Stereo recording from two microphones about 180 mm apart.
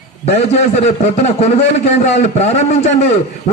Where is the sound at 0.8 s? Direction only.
40° left (ahead or behind).